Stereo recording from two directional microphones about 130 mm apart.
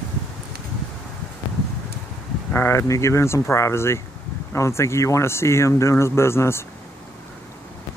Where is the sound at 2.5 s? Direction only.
20° left (ahead or behind).